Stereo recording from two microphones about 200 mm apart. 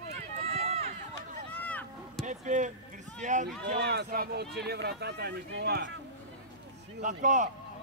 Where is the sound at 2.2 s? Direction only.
40° right (ahead or behind).